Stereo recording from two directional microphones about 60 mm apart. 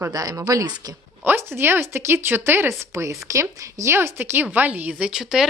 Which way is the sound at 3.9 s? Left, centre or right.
Right.